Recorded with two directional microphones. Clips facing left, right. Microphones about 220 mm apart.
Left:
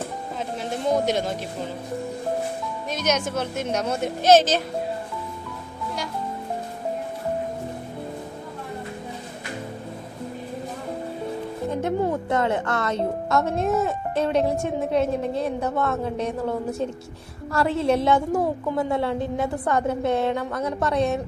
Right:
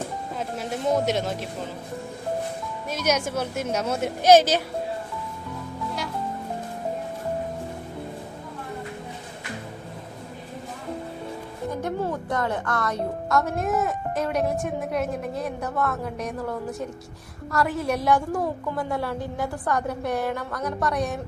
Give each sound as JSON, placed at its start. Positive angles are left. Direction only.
{"t": 0.6, "sound": "speech", "side_deg": -5}
{"t": 2.9, "sound": "speech", "side_deg": -10}
{"t": 11.7, "sound": "speech", "side_deg": 25}